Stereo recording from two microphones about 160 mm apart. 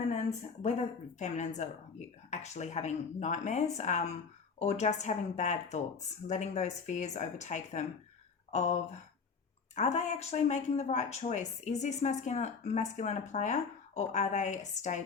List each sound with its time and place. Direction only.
0.1 s speech: 45° left (ahead or behind)